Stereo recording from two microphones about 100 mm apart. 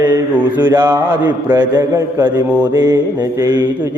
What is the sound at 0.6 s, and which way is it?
Mantra, 25° right (ahead or behind).